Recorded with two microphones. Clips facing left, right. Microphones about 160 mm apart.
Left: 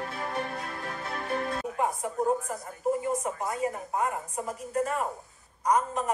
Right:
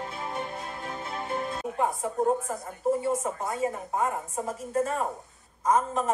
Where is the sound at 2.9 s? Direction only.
25° right (ahead or behind).